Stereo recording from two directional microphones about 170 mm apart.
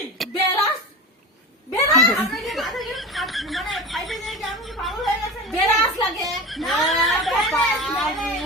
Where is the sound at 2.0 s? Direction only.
Centre (ahead or behind).